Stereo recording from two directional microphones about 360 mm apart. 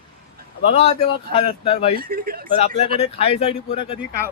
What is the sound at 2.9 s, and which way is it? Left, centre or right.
Speech, centre.